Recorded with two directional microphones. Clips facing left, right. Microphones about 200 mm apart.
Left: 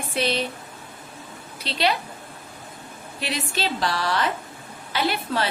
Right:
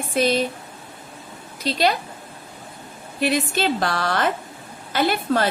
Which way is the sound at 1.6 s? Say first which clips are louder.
Right 3 dB; 45° right (ahead or behind).